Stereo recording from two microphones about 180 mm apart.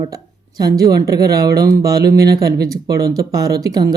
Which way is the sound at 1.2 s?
60° right (ahead or behind).